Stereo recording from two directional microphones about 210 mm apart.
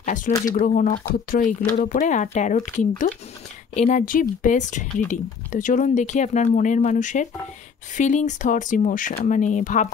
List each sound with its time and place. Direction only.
0.0 s speech: 35° left (ahead or behind)